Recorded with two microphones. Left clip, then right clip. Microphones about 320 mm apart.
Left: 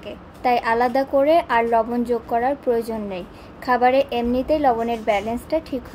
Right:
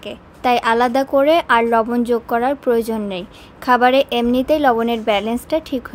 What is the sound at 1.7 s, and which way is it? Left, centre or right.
Speech, right.